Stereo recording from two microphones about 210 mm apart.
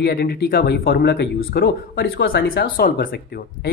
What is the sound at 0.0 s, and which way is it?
Speech, 50° left (ahead or behind).